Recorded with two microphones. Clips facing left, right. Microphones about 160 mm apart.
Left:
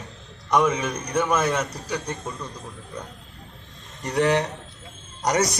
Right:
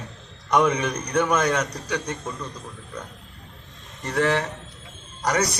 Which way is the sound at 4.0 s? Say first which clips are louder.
Left 2 dB; 15° left (ahead or behind).